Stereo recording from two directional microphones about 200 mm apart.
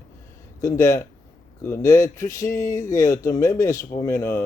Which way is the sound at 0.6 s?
15° left (ahead or behind).